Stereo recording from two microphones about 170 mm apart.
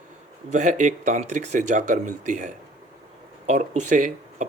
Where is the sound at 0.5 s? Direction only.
45° right (ahead or behind).